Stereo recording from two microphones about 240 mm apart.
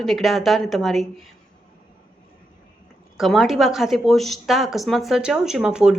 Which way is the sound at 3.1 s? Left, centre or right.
Centre.